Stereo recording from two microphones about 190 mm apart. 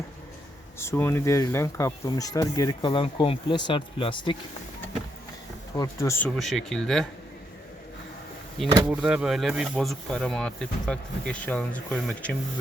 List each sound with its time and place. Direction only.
0.8 s speech: 15° left (ahead or behind)
5.7 s speech: 15° left (ahead or behind)
6.3 s speech: centre (ahead or behind)
8.5 s speech: 5° right (ahead or behind)